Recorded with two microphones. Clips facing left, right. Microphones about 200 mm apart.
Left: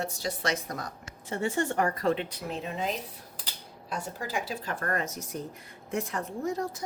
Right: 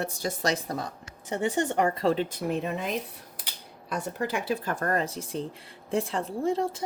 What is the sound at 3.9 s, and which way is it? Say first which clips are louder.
A woman's voice: right 4 dB; 60° right (ahead or behind).